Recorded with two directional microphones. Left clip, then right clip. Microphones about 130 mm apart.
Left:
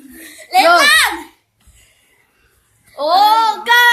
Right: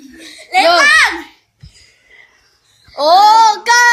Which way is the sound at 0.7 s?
15° right (ahead or behind).